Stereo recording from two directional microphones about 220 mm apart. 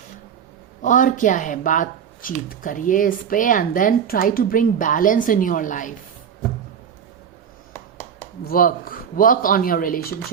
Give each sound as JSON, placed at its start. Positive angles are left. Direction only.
{"t": 0.8, "sound": "speech", "side_deg": 35}
{"t": 8.4, "sound": "speech", "side_deg": 40}